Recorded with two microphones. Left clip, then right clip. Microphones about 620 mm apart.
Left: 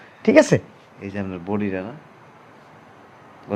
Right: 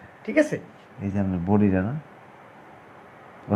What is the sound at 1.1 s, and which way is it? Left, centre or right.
Speech, centre.